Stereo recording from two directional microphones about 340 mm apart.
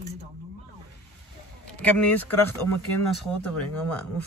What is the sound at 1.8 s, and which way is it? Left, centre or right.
Speech, centre.